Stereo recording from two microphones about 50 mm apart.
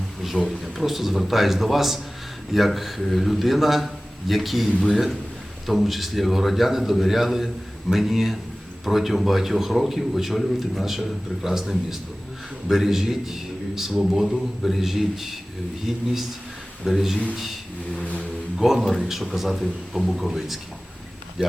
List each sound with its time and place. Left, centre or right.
0.3 s a man's voice: centre
0.9 s a man's voice: centre
18.0 s speech: left
18.8 s a man's voice: centre